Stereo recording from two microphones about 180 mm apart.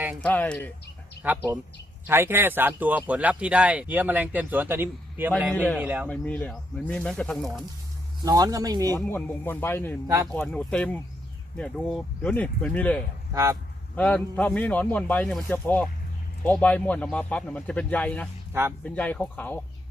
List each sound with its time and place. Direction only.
0.2 s a man's voice: 5° left (ahead or behind)
1.2 s speech: 10° right (ahead or behind)
6.1 s a man's voice: 10° left (ahead or behind)
8.2 s speech: 20° right (ahead or behind)
9.0 s a man's voice: 10° left (ahead or behind)
13.3 s speech: 15° right (ahead or behind)
13.9 s a man's voice: 10° left (ahead or behind)